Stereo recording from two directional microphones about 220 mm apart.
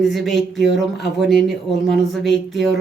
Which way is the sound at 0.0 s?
Centre (ahead or behind).